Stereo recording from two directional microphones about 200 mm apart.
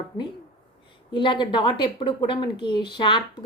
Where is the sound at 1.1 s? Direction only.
25° left (ahead or behind).